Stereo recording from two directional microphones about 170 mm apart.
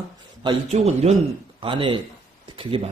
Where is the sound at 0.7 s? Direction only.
40° right (ahead or behind).